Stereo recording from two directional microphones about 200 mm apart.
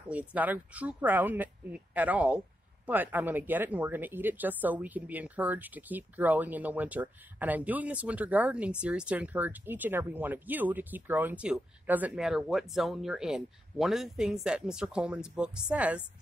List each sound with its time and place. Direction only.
0.1 s speech: 5° right (ahead or behind)